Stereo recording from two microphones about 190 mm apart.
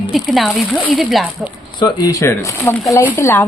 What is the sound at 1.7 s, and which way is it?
Speech, 20° left (ahead or behind).